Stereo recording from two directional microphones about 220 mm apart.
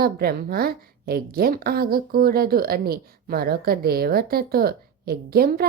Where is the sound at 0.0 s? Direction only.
45° right (ahead or behind).